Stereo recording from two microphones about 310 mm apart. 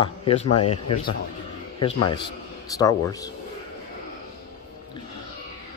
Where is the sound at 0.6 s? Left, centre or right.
Left.